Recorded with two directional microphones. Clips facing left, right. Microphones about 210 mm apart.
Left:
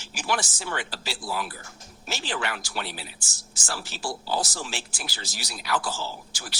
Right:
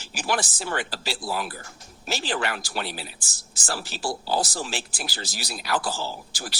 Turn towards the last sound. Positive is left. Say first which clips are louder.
# right 4 dB
turn(degrees=-35)  # may be behind; listen again after turning